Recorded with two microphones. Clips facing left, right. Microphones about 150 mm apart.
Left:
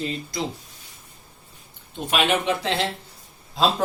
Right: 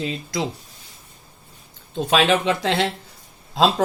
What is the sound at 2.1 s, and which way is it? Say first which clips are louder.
Speech: right 3 dB; 90° right.